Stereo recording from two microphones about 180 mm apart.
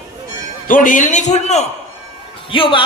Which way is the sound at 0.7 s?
45° left (ahead or behind).